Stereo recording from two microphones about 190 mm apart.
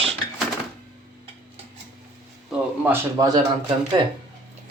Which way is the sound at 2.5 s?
10° right (ahead or behind).